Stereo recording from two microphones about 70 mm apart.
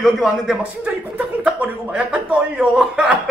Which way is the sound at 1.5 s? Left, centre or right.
Centre.